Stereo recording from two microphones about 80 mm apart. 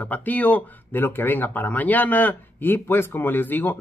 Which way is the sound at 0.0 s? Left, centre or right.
Centre.